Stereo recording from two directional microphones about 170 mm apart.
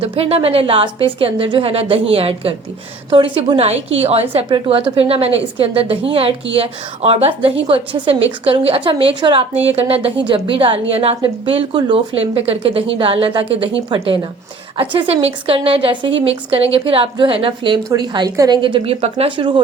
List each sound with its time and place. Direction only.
0.0 s a woman's voice: 35° right (ahead or behind)